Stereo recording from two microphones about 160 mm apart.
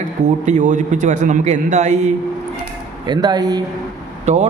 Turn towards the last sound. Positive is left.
turn(degrees=-45)  # may be behind; listen again after turning